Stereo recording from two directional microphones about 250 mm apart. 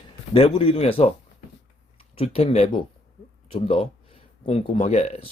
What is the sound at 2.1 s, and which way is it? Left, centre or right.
Speech, left.